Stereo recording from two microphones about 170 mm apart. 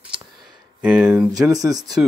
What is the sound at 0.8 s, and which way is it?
Speech, 5° right (ahead or behind).